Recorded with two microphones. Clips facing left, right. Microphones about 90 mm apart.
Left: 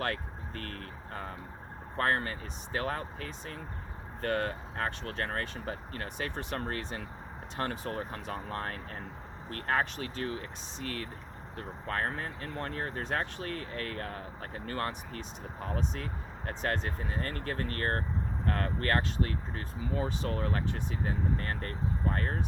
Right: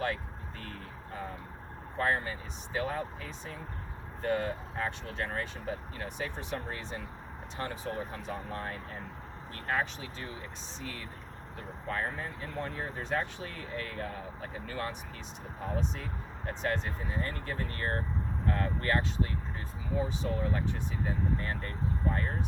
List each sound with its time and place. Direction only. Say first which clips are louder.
0.0 s speech: even; 55° left (ahead or behind)
16.6 s speech: even; 55° left (ahead or behind)